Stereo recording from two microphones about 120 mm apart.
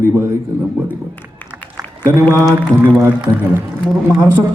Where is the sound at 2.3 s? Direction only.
25° right (ahead or behind).